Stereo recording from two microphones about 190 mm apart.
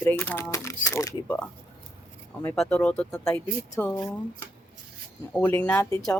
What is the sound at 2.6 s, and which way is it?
Speech, 5° left (ahead or behind).